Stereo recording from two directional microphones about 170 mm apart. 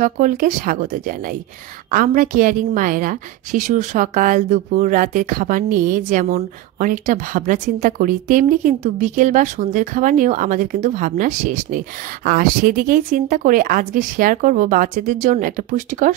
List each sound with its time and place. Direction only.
0.0 s a woman's voice: 50° right (ahead or behind)